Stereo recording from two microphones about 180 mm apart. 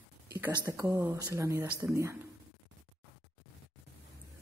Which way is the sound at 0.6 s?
20° right (ahead or behind).